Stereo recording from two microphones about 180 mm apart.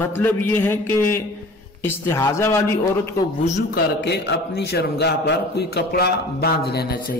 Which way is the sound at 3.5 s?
70° left (ahead or behind).